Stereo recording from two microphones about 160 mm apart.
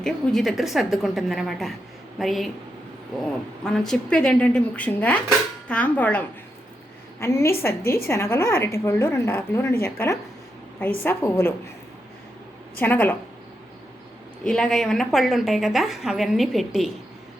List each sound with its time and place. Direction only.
0.0 s a woman's voice: 5° left (ahead or behind)
3.6 s a woman's voice: 5° left (ahead or behind)
12.8 s a woman's voice: 10° left (ahead or behind)
14.4 s a woman's voice: 5° left (ahead or behind)